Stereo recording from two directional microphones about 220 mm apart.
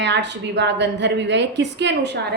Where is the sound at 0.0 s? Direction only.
50° right (ahead or behind).